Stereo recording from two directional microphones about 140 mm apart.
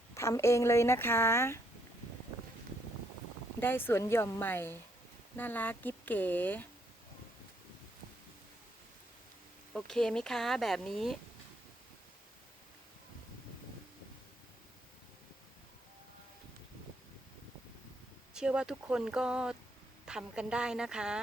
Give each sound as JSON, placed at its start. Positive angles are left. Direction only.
{"t": 0.1, "sound": "speech", "side_deg": 20}
{"t": 3.6, "sound": "speech", "side_deg": 15}
{"t": 9.7, "sound": "speech", "side_deg": 5}
{"t": 18.3, "sound": "speech", "side_deg": -5}